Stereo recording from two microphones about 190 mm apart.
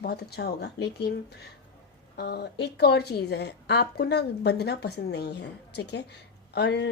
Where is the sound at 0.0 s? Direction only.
60° left (ahead or behind).